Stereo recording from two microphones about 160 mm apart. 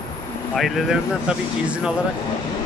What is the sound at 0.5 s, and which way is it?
Speech, centre (ahead or behind).